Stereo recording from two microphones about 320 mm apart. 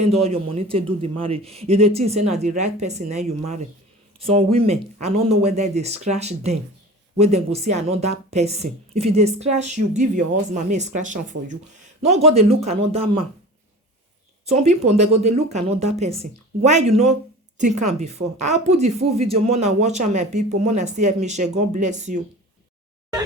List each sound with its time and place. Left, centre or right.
0.1 s speech: centre
14.4 s speech: centre